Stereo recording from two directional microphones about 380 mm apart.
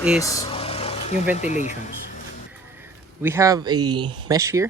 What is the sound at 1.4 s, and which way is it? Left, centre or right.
Speech, centre.